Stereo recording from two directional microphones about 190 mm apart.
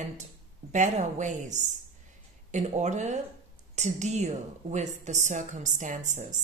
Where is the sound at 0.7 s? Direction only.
40° right (ahead or behind).